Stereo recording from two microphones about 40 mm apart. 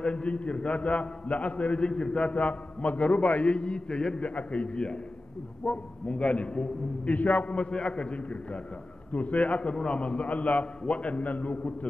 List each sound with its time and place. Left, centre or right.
0.0 s a man's voice: left
7.2 s a man's voice: left